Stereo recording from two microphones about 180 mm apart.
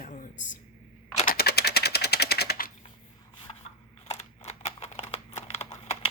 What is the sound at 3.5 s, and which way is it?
Shuffling cards, 30° left (ahead or behind).